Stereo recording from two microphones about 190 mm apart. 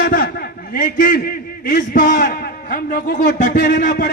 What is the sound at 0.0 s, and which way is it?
A man's voice, 50° left (ahead or behind).